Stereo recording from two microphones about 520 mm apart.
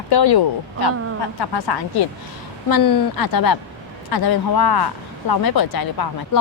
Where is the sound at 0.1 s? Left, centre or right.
Left.